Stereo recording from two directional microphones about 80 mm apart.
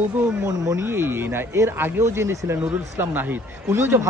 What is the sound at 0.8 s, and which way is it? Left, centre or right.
Speech, right.